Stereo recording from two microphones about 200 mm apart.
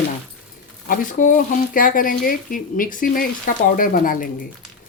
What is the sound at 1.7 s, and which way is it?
Speech, 45° left (ahead or behind).